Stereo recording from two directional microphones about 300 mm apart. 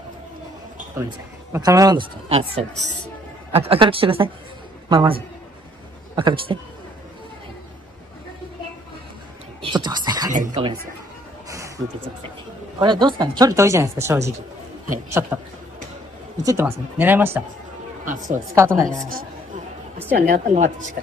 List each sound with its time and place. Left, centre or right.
1.5 s a man's voice: centre
9.6 s whispering: centre
10.3 s speech: right
11.4 s music: centre
12.7 s speech: centre
16.4 s speech: centre
18.5 s speech: centre
19.0 s a woman's voice: right